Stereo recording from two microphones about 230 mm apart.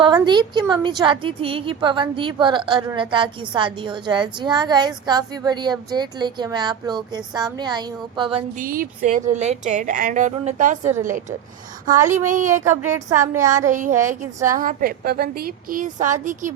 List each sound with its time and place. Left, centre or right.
0.0 s a woman's voice: centre
8.5 s a woman's voice: right
12.6 s a woman's voice: centre
13.7 s a woman's voice: right